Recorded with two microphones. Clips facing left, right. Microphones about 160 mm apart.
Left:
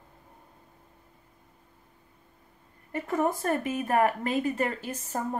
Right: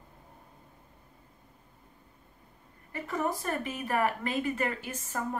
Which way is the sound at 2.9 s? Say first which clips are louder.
Left 5 dB; 45° left (ahead or behind).